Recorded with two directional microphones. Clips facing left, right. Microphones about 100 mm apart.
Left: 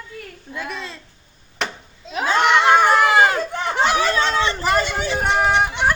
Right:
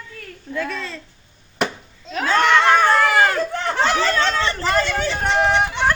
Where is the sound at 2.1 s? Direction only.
15° left (ahead or behind).